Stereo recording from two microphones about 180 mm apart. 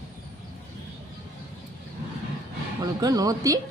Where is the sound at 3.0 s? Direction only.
20° right (ahead or behind).